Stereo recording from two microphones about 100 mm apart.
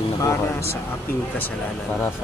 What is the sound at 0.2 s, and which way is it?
Speech, 30° left (ahead or behind).